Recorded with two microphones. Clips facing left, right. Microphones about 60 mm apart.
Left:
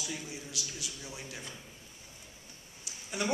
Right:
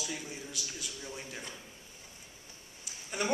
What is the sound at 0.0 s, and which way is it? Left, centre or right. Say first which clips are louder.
A man's voice: right 1 dB; centre.